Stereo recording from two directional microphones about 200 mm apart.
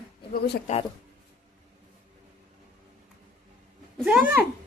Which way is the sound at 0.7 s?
35° left (ahead or behind).